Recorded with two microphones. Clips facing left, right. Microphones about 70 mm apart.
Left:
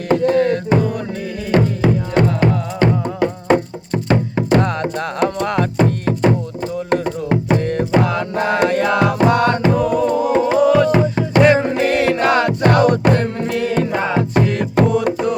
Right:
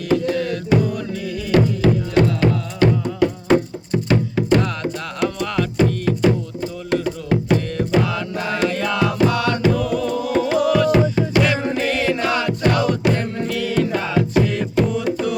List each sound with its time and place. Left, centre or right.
0.1 s music: left
5.8 s music: left
7.5 s music: left
13.9 s music: left
14.3 s music: left
14.8 s music: left